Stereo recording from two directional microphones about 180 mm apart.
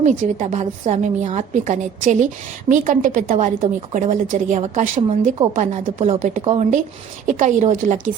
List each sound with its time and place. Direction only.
0.0 s a woman's voice: 40° right (ahead or behind)
5.4 s a woman's voice: 35° right (ahead or behind)